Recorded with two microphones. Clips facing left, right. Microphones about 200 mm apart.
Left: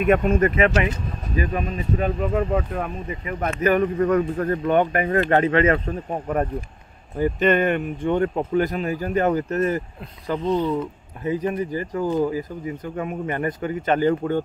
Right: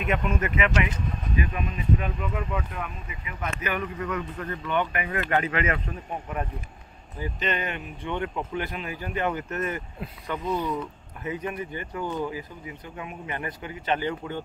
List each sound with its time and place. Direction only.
0.0 s speech: 45° left (ahead or behind)
7.2 s speech: 50° left (ahead or behind)